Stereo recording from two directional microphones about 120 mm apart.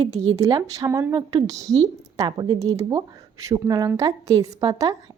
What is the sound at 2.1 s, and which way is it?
A woman's voice, 35° right (ahead or behind).